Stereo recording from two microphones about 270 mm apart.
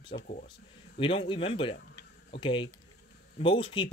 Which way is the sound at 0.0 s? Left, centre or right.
Centre.